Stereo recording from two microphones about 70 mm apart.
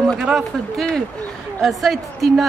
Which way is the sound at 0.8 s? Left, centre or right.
Centre.